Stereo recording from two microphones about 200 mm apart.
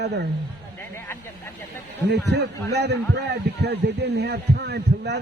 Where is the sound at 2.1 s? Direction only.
55° right (ahead or behind).